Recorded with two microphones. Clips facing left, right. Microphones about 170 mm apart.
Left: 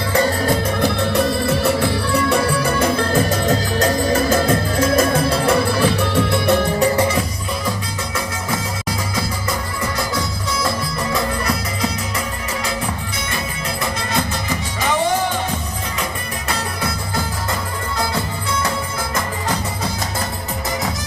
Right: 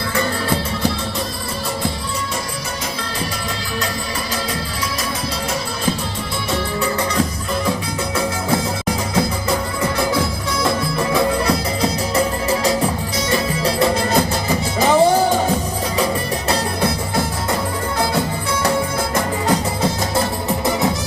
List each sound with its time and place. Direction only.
0.8 s music: 60° left (ahead or behind)
11.4 s music: 35° right (ahead or behind)